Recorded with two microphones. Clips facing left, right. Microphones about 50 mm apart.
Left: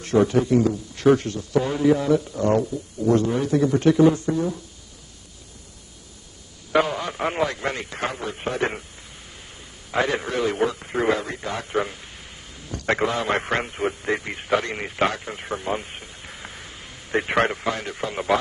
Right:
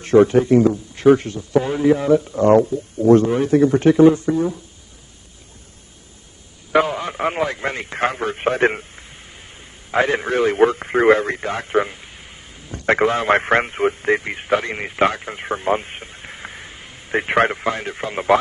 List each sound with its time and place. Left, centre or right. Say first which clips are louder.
0.0 s a man's voice: right 6 dB; right
1.0 s a man's voice: right 4 dB; right
2.4 s a man's voice: right 7 dB; right
6.7 s a man's voice: right 3 dB; centre
7.6 s a man's voice: right 5 dB; right
9.8 s a man's voice: right 5 dB; right
11.7 s a man's voice: right 6 dB; right
12.8 s a man's voice: right 6 dB; right
14.0 s a man's voice: right 6 dB; right